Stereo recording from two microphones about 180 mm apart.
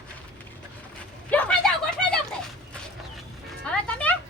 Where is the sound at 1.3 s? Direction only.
10° left (ahead or behind).